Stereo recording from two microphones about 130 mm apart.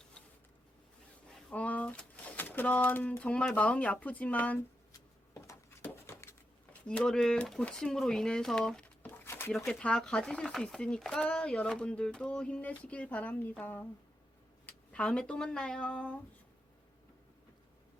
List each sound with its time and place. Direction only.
1.5 s speech: 10° left (ahead or behind)
4.9 s a sound: 25° left (ahead or behind)
6.8 s speech: 10° left (ahead or behind)
9.2 s a sound: 20° left (ahead or behind)
9.6 s speech: 5° left (ahead or behind)
14.7 s speech: 10° left (ahead or behind)